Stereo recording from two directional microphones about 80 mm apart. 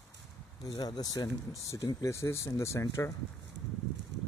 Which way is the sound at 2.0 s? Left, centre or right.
Left.